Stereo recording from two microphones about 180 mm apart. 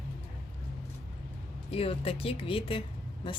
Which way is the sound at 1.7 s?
30° left (ahead or behind).